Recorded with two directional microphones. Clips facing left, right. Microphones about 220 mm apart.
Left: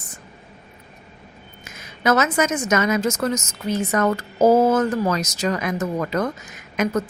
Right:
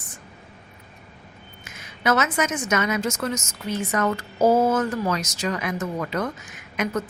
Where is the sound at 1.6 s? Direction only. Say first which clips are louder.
Left 3 dB; 40° left (ahead or behind).